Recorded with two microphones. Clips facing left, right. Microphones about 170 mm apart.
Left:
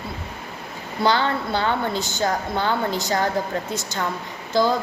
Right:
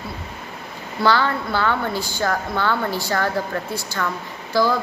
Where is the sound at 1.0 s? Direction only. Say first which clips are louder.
Right 1 dB; 20° left (ahead or behind).